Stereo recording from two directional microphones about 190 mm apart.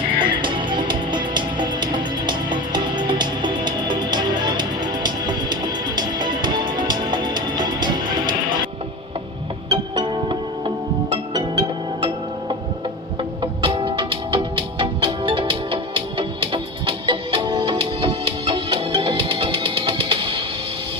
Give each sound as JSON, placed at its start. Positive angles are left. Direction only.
{"t": 0.2, "sound": "music", "side_deg": -25}
{"t": 9.6, "sound": "music", "side_deg": -25}
{"t": 13.4, "sound": "music", "side_deg": -25}